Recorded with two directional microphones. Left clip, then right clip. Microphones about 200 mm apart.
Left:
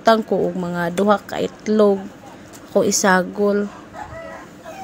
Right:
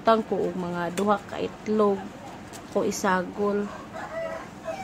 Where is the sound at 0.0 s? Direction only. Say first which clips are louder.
Left 6 dB; 25° left (ahead or behind).